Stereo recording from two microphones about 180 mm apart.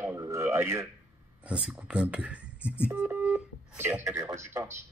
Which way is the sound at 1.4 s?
5° right (ahead or behind).